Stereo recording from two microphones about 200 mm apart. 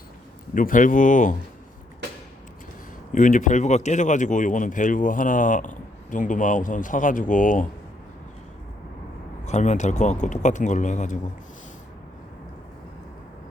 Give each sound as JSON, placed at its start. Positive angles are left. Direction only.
{"t": 0.5, "sound": "speech", "side_deg": 40}
{"t": 3.1, "sound": "speech", "side_deg": 40}
{"t": 9.4, "sound": "speech", "side_deg": 35}